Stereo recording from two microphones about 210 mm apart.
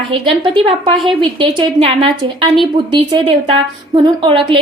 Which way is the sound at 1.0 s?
25° right (ahead or behind).